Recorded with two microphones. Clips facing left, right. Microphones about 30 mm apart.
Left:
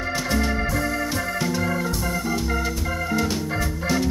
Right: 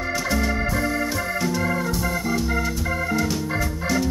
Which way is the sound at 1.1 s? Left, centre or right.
Centre.